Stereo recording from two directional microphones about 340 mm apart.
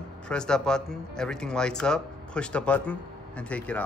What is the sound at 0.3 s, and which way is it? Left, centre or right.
Speech, centre.